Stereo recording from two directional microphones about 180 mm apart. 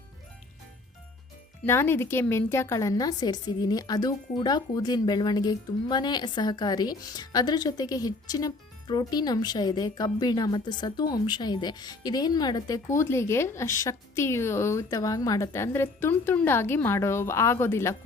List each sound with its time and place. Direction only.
1.6 s a woman's voice: 15° left (ahead or behind)